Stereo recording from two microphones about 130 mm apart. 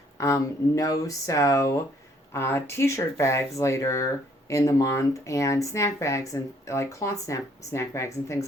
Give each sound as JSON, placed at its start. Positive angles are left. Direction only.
{"t": 0.2, "sound": "speech", "side_deg": 25}